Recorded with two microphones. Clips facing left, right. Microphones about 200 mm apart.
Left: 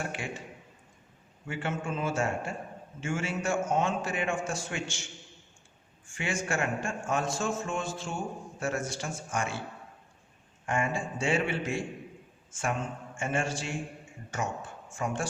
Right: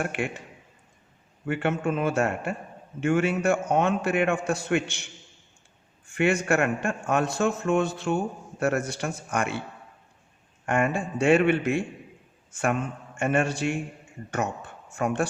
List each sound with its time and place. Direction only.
0.0 s a man's voice: 60° right (ahead or behind)
1.5 s a man's voice: 60° right (ahead or behind)
6.1 s a man's voice: 65° right (ahead or behind)
10.7 s a man's voice: 65° right (ahead or behind)